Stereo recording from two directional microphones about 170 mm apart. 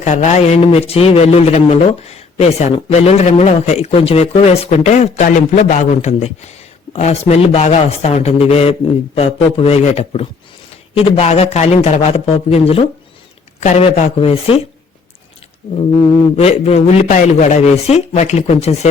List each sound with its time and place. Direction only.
0.0 s a man's voice: 45° left (ahead or behind)
16.3 s a man's voice: 35° left (ahead or behind)